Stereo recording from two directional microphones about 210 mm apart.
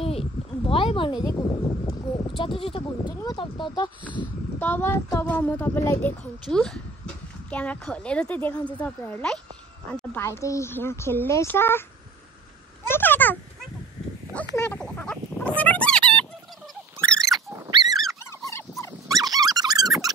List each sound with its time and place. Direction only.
0.0 s a sound: 30° left (ahead or behind)
4.2 s speech: 10° left (ahead or behind)
12.8 s speech: 10° left (ahead or behind)
14.5 s speech: 10° left (ahead or behind)
17.0 s a sound: 5° left (ahead or behind)
17.6 s dog: 20° right (ahead or behind)
18.2 s dog: 15° left (ahead or behind)
19.0 s dog: 15° right (ahead or behind)